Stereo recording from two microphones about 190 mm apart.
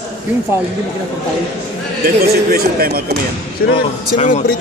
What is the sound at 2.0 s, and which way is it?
Speech, 50° right (ahead or behind).